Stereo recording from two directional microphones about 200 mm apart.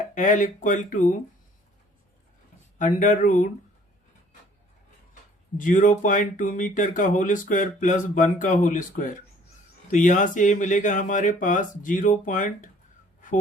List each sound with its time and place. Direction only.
0.1 s speech: 40° left (ahead or behind)
2.7 s speech: 40° left (ahead or behind)
5.5 s speech: 40° left (ahead or behind)